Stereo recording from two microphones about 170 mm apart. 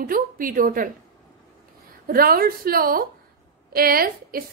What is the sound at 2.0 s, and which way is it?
A woman's voice, 60° right (ahead or behind).